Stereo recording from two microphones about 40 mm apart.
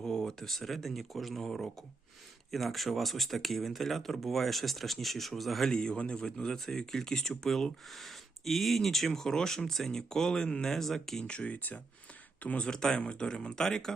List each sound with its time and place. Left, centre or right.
0.0 s speech: centre
5.7 s speech: centre
10.7 s speech: centre
11.2 s speech: left
12.5 s speech: left